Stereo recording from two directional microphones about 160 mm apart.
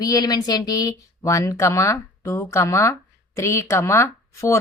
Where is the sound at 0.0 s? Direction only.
25° left (ahead or behind).